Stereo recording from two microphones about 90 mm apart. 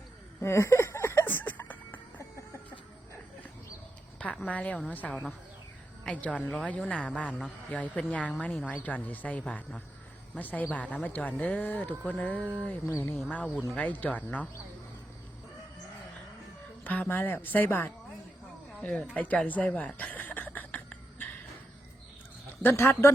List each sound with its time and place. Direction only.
0.4 s a sound: 30° left (ahead or behind)
4.4 s speech: 15° left (ahead or behind)
13.0 s speech: 25° left (ahead or behind)
13.2 s speech: 15° left (ahead or behind)
16.8 s speech: 20° left (ahead or behind)
18.9 s chuckle: 15° left (ahead or behind)
22.7 s speech: 30° left (ahead or behind)